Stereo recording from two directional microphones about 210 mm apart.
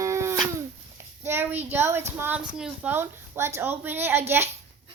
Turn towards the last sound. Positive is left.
turn(degrees=-10)  # may be behind; listen again after turning